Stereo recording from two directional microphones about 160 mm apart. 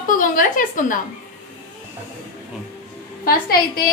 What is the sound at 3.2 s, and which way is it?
Speech, 70° left (ahead or behind).